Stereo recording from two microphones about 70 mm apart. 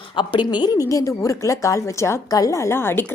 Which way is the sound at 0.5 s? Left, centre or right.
Left.